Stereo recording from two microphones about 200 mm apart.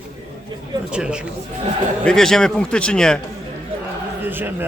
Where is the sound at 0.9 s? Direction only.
5° right (ahead or behind).